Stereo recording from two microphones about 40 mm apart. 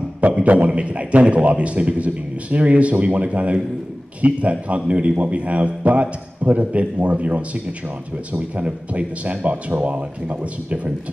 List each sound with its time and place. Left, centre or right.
0.3 s a man's voice: right